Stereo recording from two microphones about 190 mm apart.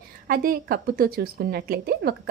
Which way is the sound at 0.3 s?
50° right (ahead or behind).